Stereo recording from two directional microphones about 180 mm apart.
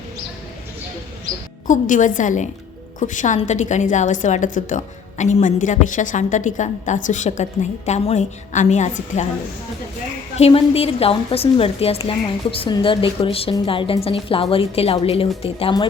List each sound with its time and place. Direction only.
1.6 s a woman's voice: 45° left (ahead or behind)
10.3 s a woman's voice: 35° left (ahead or behind)